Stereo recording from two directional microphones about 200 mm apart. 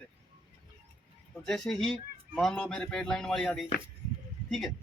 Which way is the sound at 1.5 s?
Centre (ahead or behind).